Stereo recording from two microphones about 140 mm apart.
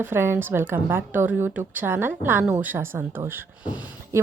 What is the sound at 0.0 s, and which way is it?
A woman's voice, 15° right (ahead or behind).